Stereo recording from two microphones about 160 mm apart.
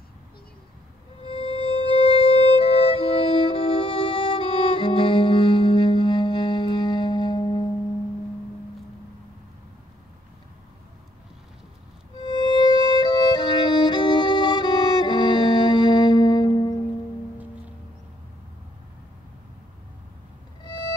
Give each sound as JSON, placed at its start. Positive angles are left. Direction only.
{"t": 1.2, "sound": "music", "side_deg": 35}
{"t": 12.2, "sound": "music", "side_deg": 25}
{"t": 12.6, "sound": "violin", "side_deg": 25}